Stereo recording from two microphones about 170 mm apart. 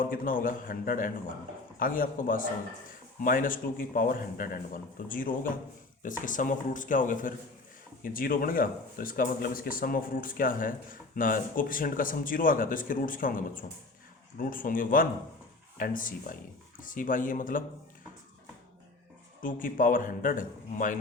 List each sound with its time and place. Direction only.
0.0 s a man's voice: 55° left (ahead or behind)
19.4 s a man's voice: 55° left (ahead or behind)